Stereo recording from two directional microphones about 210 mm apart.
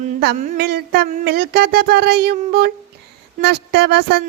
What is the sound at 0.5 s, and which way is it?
Speech, 50° right (ahead or behind).